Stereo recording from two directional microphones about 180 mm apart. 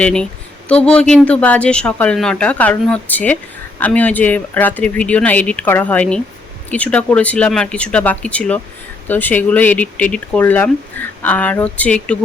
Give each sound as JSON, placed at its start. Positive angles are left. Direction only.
{"t": 0.0, "sound": "speech", "side_deg": 5}